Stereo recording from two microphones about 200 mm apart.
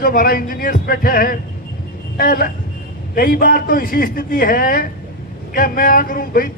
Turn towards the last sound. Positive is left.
turn(degrees=45)  # may be behind; listen again after turning